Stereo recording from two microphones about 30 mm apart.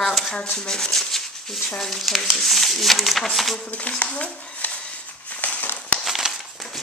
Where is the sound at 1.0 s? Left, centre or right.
Centre.